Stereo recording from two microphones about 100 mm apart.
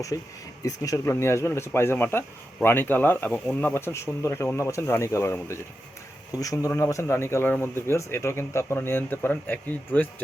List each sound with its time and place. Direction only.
0.1 s speech: 35° left (ahead or behind); by 10.1 s 15° left (ahead or behind)